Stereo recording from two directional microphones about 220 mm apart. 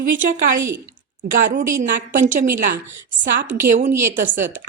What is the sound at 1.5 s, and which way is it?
A woman's voice, 35° right (ahead or behind).